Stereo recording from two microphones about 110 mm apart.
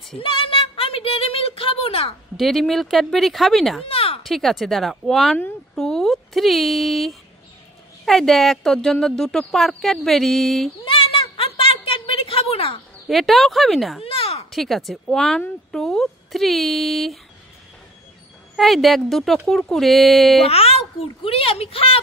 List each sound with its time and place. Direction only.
0.2 s speech: 55° left (ahead or behind)
2.3 s speech: centre (ahead or behind)
3.8 s a sound: 60° left (ahead or behind)
4.2 s speech: centre (ahead or behind)
10.8 s a sound: 55° left (ahead or behind)
13.1 s speech: centre (ahead or behind)
14.0 s a sound: 60° left (ahead or behind)
14.5 s speech: centre (ahead or behind)
18.6 s speech: centre (ahead or behind)
20.4 s a child's voice: 65° left (ahead or behind)